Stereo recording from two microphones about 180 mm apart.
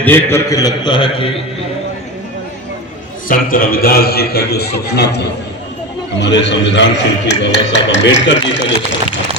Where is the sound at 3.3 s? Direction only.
50° left (ahead or behind); by 8.6 s 80° left.